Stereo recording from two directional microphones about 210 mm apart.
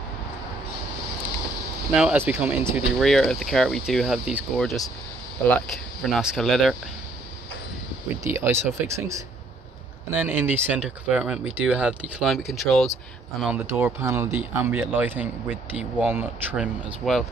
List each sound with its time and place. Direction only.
2.0 s speech: 5° right (ahead or behind)
8.3 s speech: 10° right (ahead or behind)
13.7 s speech: 10° right (ahead or behind)